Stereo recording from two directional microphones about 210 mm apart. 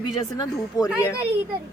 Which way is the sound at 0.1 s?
20° left (ahead or behind).